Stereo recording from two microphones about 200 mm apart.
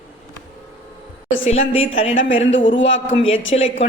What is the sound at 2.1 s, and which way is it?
A man's voice, 70° left (ahead or behind).